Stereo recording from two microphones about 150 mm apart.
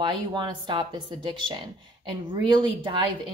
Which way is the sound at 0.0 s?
30° right (ahead or behind).